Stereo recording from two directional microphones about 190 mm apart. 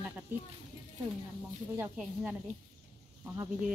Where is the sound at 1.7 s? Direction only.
10° right (ahead or behind).